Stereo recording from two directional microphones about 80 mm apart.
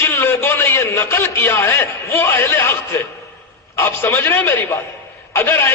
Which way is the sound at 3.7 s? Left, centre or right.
Left.